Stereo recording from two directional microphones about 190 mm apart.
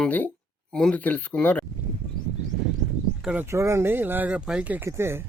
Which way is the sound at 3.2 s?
10° right (ahead or behind).